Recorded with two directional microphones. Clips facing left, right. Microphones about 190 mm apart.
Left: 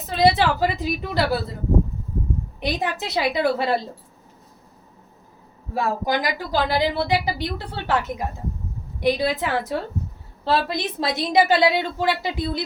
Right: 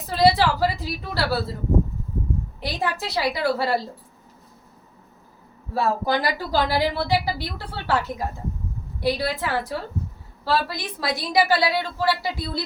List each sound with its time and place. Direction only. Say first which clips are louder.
0.1 s a woman's voice: even; 20° left (ahead or behind)
2.6 s a woman's voice: left 3 dB; 20° left (ahead or behind)
5.7 s a woman's voice: right 1 dB; 15° left (ahead or behind)